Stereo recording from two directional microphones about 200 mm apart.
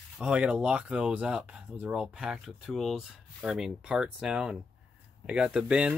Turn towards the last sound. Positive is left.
turn(degrees=-5)  # may be behind; listen again after turning